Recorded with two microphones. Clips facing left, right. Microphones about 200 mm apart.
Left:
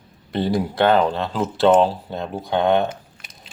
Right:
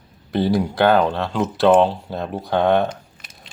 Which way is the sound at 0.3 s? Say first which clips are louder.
Right 2 dB; centre (ahead or behind).